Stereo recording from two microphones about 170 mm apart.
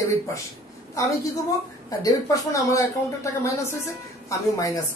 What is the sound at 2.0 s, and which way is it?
Speech, 20° left (ahead or behind).